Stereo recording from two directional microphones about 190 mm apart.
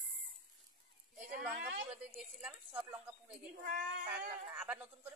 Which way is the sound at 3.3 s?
45° right (ahead or behind).